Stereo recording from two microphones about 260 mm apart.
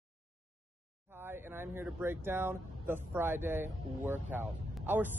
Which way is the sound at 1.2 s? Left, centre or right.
Centre.